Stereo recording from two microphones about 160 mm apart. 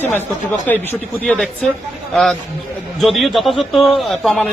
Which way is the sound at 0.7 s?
10° left (ahead or behind).